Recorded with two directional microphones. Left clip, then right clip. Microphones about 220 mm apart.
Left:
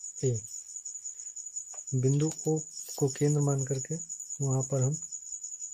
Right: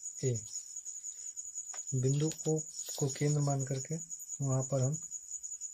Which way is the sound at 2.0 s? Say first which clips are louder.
Left 5 dB; 35° left (ahead or behind).